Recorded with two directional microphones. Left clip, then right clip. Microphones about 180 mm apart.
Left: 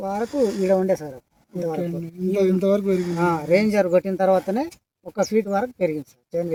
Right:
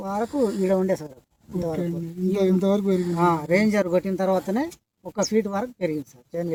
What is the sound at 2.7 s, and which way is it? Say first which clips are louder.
Speech: left 2 dB; 20° right (ahead or behind).